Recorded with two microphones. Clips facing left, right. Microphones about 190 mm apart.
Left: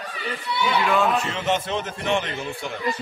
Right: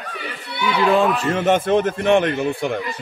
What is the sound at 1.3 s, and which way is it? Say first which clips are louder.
Speech: right 8 dB; 50° right (ahead or behind).